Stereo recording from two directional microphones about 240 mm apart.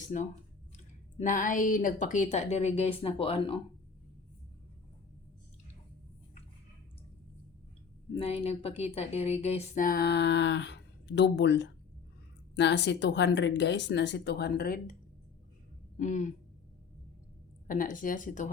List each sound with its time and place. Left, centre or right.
0.1 s a woman's voice: left
8.1 s speech: left
16.0 s speech: left
17.7 s speech: left